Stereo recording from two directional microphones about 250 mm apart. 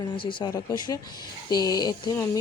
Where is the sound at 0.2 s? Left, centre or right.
Centre.